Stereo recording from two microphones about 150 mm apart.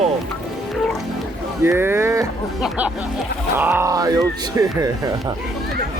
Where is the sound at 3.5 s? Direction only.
15° right (ahead or behind).